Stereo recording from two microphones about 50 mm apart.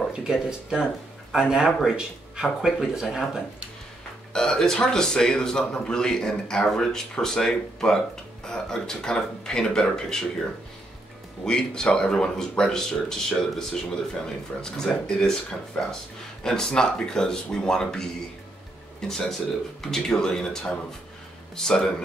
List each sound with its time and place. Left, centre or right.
0.1 s speech: centre
4.3 s speech: centre
11.4 s speech: centre